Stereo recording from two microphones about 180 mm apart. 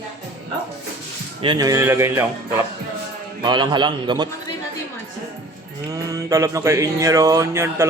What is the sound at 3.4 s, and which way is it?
Speech, 25° right (ahead or behind).